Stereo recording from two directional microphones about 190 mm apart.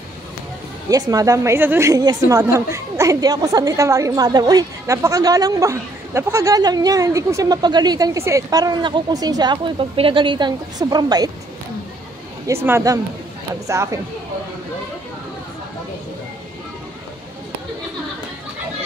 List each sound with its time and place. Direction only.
0.8 s a woman's voice: 20° right (ahead or behind)
12.6 s speech: 15° right (ahead or behind)